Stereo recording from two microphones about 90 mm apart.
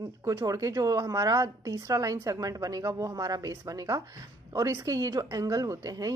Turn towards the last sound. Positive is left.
turn(degrees=-45)  # may be behind; listen again after turning